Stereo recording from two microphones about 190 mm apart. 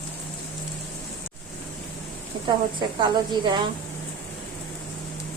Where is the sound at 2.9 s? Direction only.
25° right (ahead or behind).